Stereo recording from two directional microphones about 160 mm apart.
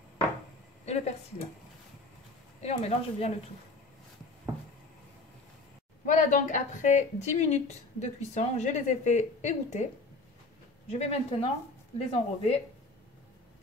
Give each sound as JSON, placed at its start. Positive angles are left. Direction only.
{"t": 0.8, "sound": "a woman's voice", "side_deg": 40}
{"t": 2.6, "sound": "a woman's voice", "side_deg": 40}
{"t": 6.0, "sound": "a woman's voice", "side_deg": 50}
{"t": 10.9, "sound": "speech", "side_deg": 40}